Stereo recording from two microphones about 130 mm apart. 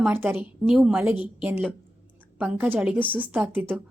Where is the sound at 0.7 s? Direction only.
5° right (ahead or behind).